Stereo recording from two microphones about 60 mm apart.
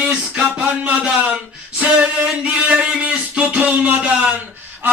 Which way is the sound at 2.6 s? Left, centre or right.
Right.